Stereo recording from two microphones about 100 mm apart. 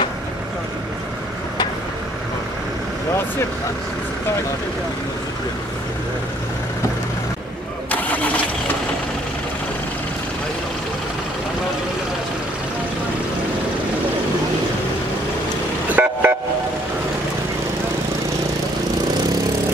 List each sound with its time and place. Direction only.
7.9 s engine starting: 15° left (ahead or behind)
15.9 s vehicle: 15° right (ahead or behind)